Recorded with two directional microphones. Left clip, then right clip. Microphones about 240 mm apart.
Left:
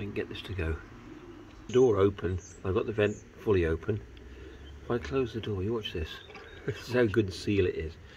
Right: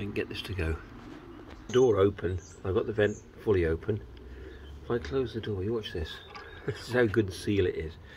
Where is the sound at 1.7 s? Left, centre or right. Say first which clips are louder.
Even; centre.